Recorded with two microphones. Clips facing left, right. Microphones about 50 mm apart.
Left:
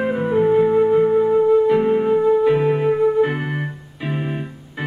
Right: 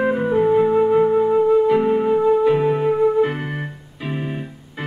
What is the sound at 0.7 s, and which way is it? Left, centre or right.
Flute, centre.